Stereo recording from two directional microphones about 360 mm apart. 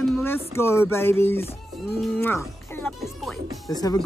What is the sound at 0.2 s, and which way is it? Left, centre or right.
A woman's voice, centre.